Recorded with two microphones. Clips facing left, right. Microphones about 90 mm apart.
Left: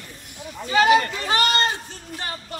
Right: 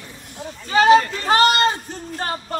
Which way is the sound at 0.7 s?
30° right (ahead or behind).